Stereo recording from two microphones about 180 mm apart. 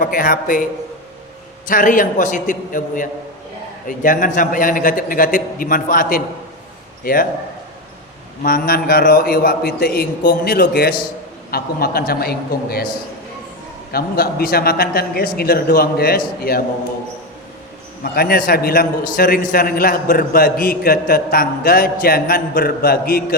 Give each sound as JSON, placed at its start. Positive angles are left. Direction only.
{"t": 0.0, "sound": "a man's voice", "side_deg": 50}
{"t": 8.4, "sound": "a man's voice", "side_deg": 55}
{"t": 13.9, "sound": "a man's voice", "side_deg": 55}
{"t": 18.0, "sound": "a man's voice", "side_deg": 55}